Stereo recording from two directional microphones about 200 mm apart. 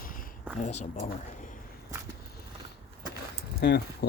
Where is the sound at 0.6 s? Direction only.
35° left (ahead or behind).